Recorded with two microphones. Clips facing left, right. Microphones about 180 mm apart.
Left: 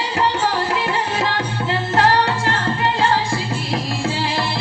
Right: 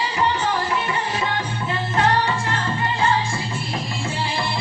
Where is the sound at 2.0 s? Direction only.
70° left (ahead or behind).